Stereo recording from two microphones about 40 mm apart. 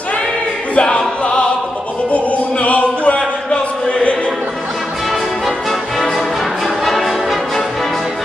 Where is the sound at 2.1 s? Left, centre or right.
Left.